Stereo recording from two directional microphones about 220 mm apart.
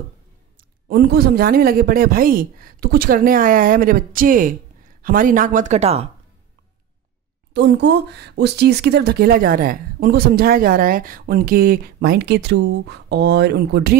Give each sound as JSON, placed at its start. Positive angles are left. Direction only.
{"t": 0.6, "sound": "a man's voice", "side_deg": -45}
{"t": 7.5, "sound": "speech", "side_deg": -50}